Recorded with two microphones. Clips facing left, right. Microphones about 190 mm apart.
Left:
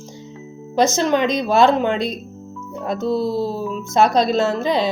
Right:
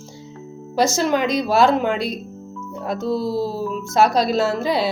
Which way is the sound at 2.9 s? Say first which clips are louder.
Left 2 dB; 25° left (ahead or behind).